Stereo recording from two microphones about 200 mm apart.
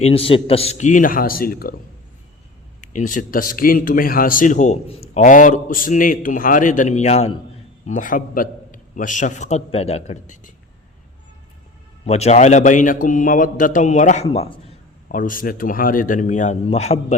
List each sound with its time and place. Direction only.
0.0 s speech: 30° left (ahead or behind); by 1.7 s 50° left (ahead or behind)
2.8 s speech: 40° left (ahead or behind)
12.0 s speech: 30° left (ahead or behind)